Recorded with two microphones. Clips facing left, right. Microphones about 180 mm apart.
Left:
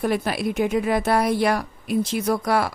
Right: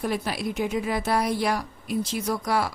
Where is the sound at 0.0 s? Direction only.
60° left (ahead or behind).